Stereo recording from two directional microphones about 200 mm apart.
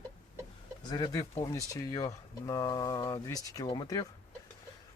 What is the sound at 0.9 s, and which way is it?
Speech, 20° left (ahead or behind).